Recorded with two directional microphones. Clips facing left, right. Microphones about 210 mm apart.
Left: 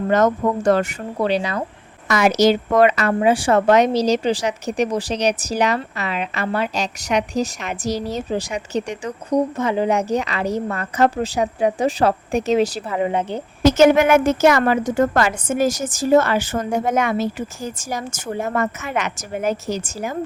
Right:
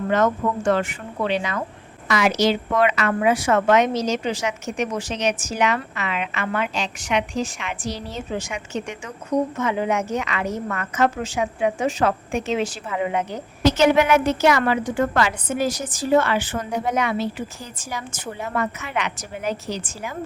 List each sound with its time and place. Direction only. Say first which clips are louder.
0.1 s a woman's voice: left 3 dB; 40° left (ahead or behind)
2.0 s a woman's voice: left 4 dB; 45° left (ahead or behind)
13.6 s a woman's voice: left 4 dB; 45° left (ahead or behind)